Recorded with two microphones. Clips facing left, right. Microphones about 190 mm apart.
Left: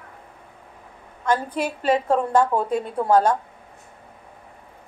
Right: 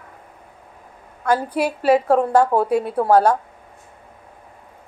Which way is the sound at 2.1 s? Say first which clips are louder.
Right 3 dB; 40° right (ahead or behind).